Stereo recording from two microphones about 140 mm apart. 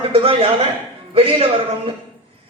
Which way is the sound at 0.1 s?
45° right (ahead or behind).